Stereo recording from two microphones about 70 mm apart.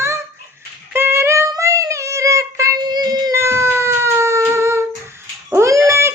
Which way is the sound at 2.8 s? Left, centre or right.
Right.